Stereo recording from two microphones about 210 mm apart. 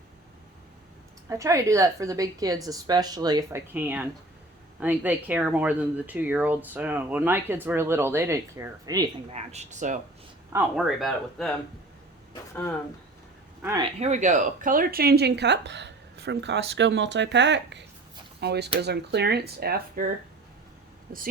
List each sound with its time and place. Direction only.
1.3 s speech: 15° right (ahead or behind)
9.3 s speech: 30° right (ahead or behind)
10.5 s speech: 5° right (ahead or behind)
13.6 s speech: 15° right (ahead or behind)
14.0 s speech: 35° right (ahead or behind)